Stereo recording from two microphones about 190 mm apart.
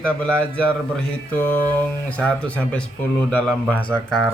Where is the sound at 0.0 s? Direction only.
5° left (ahead or behind).